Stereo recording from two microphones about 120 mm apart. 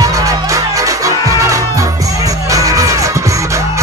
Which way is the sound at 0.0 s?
25° right (ahead or behind).